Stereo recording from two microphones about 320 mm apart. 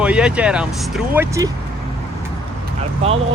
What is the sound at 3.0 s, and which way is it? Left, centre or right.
Speech, centre.